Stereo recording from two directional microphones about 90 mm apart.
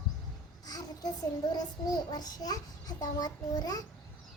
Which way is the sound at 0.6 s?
45° left (ahead or behind).